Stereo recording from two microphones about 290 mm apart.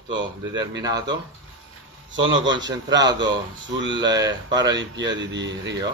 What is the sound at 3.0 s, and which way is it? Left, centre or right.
Speech, centre.